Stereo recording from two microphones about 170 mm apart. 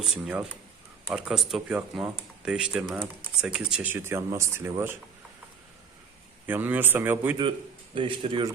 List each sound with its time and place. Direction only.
0.0 s speech: 5° right (ahead or behind)
6.4 s speech: 10° right (ahead or behind)
7.9 s a man's voice: 30° right (ahead or behind)